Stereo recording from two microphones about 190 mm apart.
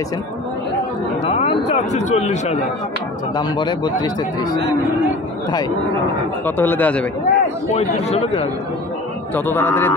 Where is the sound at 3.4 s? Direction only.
25° left (ahead or behind).